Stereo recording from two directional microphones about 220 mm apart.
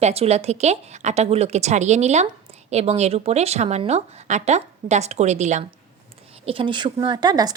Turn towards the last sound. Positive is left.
turn(degrees=-20)  # may be behind; listen again after turning